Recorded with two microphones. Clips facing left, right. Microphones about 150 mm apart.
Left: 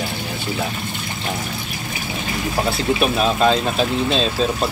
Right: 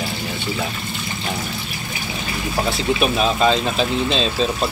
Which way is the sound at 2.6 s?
Centre (ahead or behind).